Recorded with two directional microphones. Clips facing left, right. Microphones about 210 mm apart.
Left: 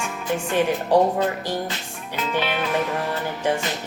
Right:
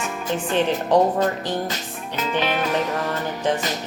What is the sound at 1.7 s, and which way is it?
Music, 40° right (ahead or behind).